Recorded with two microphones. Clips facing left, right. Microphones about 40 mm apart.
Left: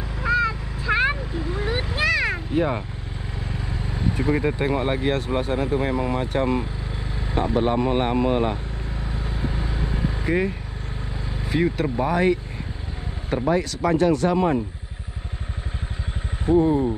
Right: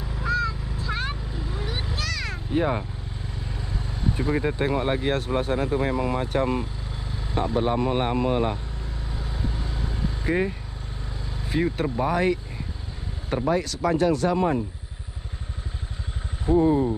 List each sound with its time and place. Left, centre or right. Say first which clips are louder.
0.3 s vehicle: left 4 dB; centre
2.5 s speech: right 1 dB; centre
3.5 s vehicle: left 5 dB; left
4.3 s speech: left 3 dB; left
4.6 s speech: left 1 dB; left
7.3 s speech: left 2 dB; left
9.0 s vehicle: left 3 dB; left
11.4 s speech: left 2 dB; left
13.3 s speech: left 2 dB; left
16.5 s speech: left 2 dB; left